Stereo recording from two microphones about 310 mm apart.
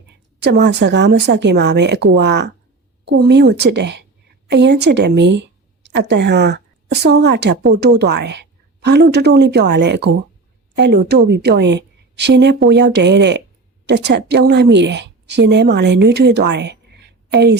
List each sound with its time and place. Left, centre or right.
0.4 s a woman's voice: right